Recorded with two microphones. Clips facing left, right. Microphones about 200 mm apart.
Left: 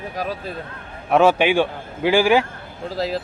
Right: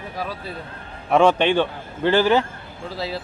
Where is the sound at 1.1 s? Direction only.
5° left (ahead or behind).